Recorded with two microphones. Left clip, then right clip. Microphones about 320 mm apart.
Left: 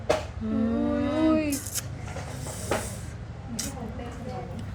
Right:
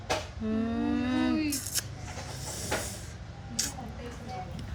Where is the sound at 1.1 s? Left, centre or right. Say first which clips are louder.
Left 8 dB; right.